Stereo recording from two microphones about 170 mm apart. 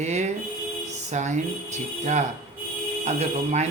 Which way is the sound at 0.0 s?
40° right (ahead or behind).